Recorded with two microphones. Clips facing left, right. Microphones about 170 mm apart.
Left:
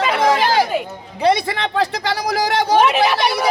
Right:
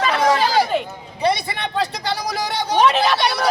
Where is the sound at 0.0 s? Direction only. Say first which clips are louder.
Left 1 dB; 20° left (ahead or behind).